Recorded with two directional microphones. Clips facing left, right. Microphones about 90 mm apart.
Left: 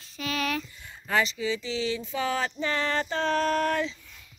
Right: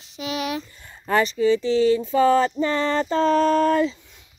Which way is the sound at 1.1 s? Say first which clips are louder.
Right 8 dB; 45° right (ahead or behind).